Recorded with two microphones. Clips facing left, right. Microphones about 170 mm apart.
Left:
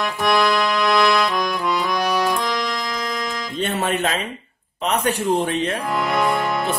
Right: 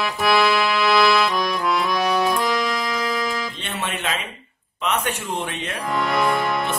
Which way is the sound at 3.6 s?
40° left (ahead or behind).